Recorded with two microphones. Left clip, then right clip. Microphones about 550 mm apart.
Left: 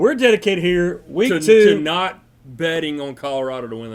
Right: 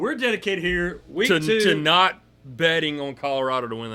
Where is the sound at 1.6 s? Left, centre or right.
Right.